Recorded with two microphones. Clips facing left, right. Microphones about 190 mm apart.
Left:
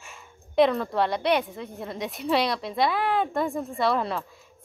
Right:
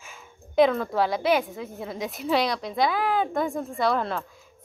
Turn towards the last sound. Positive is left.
turn(degrees=0)  # may be behind; listen again after turning